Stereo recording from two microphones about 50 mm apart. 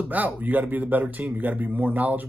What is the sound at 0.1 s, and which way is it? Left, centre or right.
Speech, right.